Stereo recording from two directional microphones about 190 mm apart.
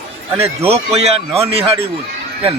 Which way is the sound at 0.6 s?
35° right (ahead or behind).